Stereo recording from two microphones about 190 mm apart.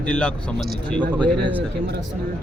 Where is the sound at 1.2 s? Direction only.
25° right (ahead or behind).